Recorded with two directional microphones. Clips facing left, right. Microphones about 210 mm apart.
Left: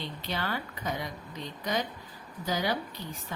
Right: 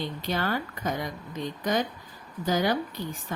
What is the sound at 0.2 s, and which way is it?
Speech, 45° right (ahead or behind).